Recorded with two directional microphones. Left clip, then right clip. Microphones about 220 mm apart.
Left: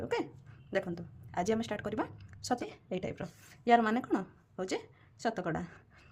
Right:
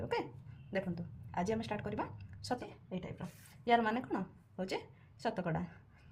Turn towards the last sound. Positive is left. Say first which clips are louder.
# left 3 dB
turn(degrees=25)  # may be behind; listen again after turning